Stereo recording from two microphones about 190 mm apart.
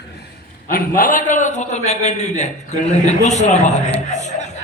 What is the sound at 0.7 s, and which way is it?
A man's voice, 45° left (ahead or behind).